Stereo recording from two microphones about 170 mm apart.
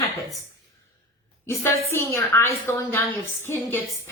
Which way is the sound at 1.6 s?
15° left (ahead or behind).